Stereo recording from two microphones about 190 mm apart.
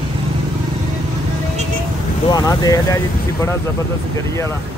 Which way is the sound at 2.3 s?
20° left (ahead or behind).